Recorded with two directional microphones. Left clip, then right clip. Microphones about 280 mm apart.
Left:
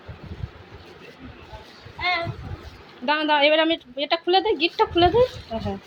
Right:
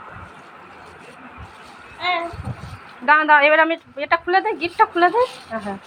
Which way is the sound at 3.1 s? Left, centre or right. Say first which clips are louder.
Right 6 dB; left.